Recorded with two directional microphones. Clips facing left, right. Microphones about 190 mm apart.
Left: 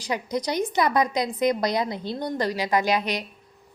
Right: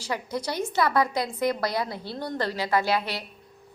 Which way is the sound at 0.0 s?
20° left (ahead or behind).